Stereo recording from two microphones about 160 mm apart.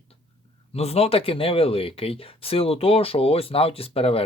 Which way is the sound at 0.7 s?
40° left (ahead or behind).